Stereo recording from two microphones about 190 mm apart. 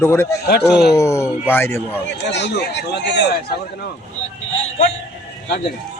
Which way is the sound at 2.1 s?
65° left (ahead or behind).